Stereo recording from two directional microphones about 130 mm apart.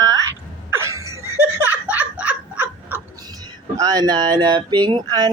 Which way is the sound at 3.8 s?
30° right (ahead or behind).